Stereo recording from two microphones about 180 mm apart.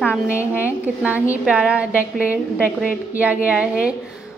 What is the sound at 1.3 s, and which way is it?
Speech, 5° right (ahead or behind).